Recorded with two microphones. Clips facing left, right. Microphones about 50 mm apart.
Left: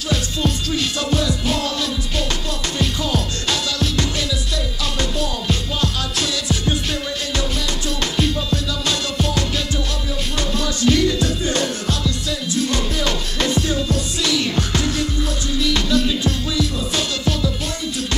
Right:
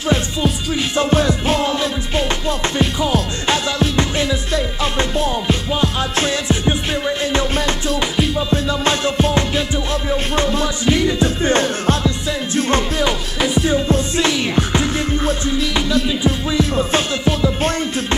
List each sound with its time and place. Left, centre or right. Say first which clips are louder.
0.9 s music: right 5 dB; right
13.0 s music: right 3 dB; centre
13.8 s music: right 5 dB; right